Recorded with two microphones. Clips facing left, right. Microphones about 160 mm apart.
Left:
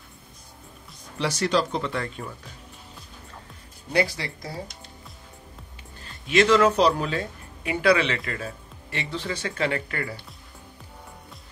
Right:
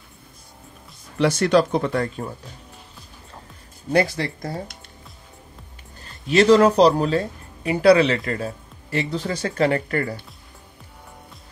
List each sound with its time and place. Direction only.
1.1 s speech: 55° right (ahead or behind)
3.9 s speech: 50° right (ahead or behind)
6.2 s speech: 35° right (ahead or behind)